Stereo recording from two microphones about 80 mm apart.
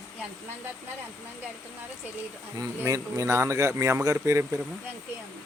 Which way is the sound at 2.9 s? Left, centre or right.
Right.